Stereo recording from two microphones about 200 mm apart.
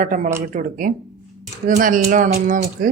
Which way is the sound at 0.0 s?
40° right (ahead or behind).